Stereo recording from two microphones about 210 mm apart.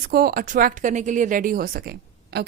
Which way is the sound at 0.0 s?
45° right (ahead or behind).